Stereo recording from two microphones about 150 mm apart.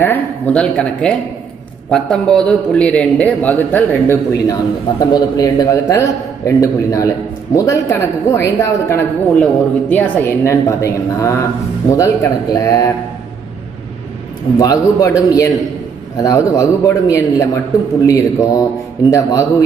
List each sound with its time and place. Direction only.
0.0 s a man's voice: 10° left (ahead or behind)
14.6 s a man's voice: 25° left (ahead or behind)